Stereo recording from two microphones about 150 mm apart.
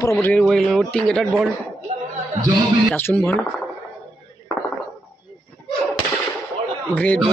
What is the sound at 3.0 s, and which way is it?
Speech, 15° left (ahead or behind).